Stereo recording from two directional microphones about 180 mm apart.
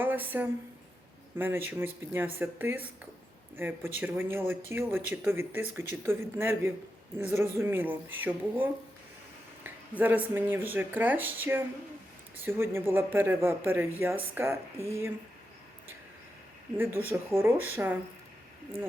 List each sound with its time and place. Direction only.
0.0 s speech: 10° right (ahead or behind)
14.8 s speech: 15° left (ahead or behind)
16.7 s speech: 10° right (ahead or behind)